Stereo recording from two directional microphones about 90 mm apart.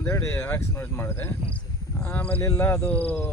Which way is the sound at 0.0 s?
25° left (ahead or behind).